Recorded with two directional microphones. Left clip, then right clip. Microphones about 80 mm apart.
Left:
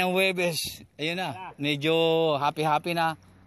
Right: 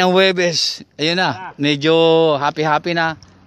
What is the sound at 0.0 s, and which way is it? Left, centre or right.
Speech, right.